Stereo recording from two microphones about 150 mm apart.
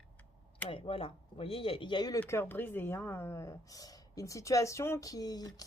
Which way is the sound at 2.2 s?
15° left (ahead or behind).